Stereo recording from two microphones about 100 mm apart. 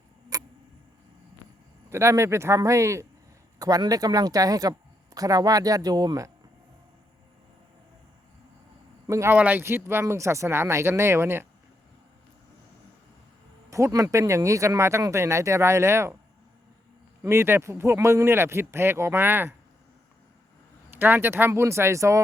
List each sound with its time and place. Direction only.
0.3 s tick-tock: 35° right (ahead or behind)
1.9 s speech: 25° right (ahead or behind)
9.0 s speech: 30° right (ahead or behind)
9.3 s speech: 15° right (ahead or behind)
13.7 s speech: 30° right (ahead or behind)
17.2 s speech: 25° right (ahead or behind)
20.9 s speech: 20° right (ahead or behind)